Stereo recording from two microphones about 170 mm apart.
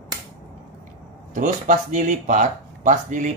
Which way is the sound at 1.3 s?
50° right (ahead or behind).